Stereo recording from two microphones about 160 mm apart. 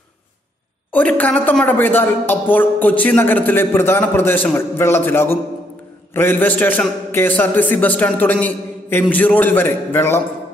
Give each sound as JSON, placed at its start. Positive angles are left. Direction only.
{"t": 0.9, "sound": "a woman's voice", "side_deg": 10}